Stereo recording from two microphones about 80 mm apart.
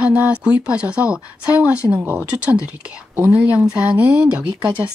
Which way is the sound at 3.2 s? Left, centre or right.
Right.